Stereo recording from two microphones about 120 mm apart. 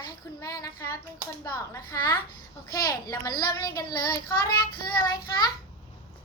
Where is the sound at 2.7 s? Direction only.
30° left (ahead or behind).